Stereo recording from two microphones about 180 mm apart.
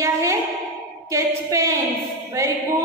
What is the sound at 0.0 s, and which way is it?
Music, 15° right (ahead or behind).